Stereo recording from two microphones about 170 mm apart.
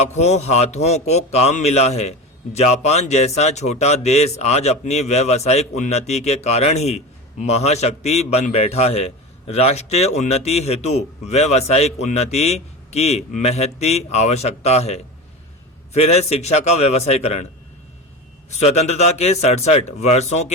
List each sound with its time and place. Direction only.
0.0 s speech: 40° left (ahead or behind)
18.6 s speech: 40° left (ahead or behind)